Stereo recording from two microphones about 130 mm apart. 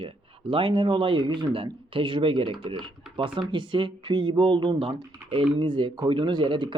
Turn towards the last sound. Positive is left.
turn(degrees=-40)  # may be behind; listen again after turning